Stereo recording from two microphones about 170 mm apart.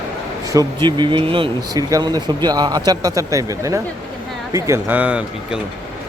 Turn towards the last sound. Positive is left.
turn(degrees=-10)  # may be behind; listen again after turning